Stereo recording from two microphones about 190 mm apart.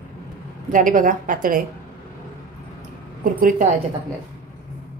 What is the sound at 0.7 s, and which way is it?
Speech, 45° right (ahead or behind).